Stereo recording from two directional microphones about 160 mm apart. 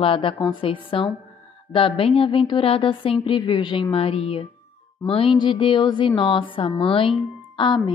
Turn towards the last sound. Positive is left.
turn(degrees=30)  # may be behind; listen again after turning